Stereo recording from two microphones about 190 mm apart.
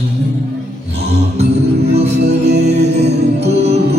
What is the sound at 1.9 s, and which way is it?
Music, 35° right (ahead or behind).